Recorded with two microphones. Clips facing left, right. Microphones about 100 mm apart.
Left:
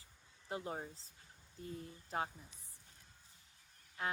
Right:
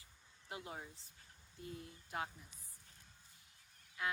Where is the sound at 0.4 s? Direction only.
35° left (ahead or behind).